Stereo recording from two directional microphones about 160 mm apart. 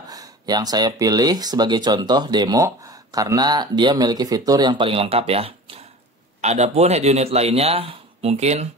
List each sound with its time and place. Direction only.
0.1 s speech: 25° right (ahead or behind); by 8.6 s 40° right (ahead or behind)